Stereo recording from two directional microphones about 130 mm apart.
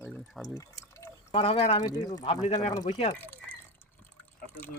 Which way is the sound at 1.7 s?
30° left (ahead or behind).